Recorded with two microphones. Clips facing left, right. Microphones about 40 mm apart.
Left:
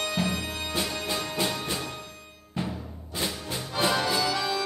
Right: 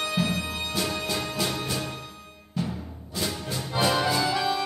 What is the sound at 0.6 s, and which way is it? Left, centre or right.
Music, left.